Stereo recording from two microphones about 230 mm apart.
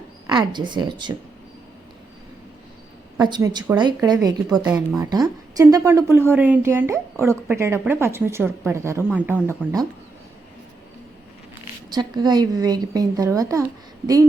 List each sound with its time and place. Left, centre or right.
0.3 s speech: centre
3.2 s a woman's voice: centre
11.9 s a woman's voice: centre